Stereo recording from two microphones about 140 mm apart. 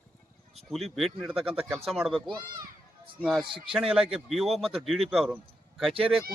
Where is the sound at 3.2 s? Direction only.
Centre (ahead or behind).